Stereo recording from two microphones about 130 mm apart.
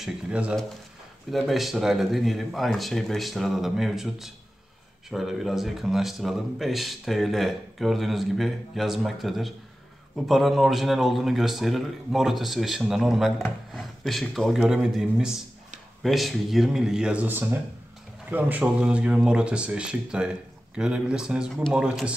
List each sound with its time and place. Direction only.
0.0 s speech: 10° right (ahead or behind)